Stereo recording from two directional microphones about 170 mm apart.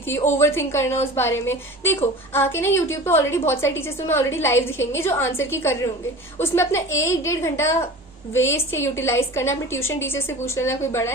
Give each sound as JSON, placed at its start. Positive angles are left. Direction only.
{"t": 0.3, "sound": "a woman's voice", "side_deg": 15}